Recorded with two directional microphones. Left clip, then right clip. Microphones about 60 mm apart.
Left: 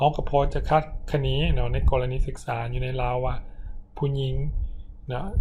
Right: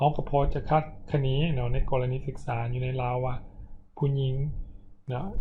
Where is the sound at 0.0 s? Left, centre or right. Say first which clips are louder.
Left 3 dB; left.